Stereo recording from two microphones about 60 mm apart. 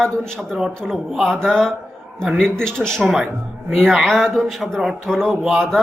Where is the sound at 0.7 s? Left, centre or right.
Centre.